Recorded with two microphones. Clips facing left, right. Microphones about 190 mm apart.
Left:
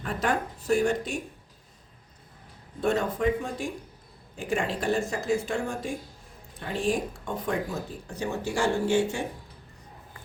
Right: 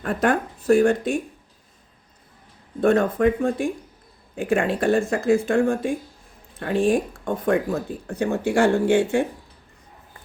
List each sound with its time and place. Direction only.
0.0 s speech: 55° right (ahead or behind)
2.8 s speech: 55° right (ahead or behind)